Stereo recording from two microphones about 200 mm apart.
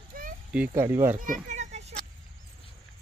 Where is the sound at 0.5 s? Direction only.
10° right (ahead or behind).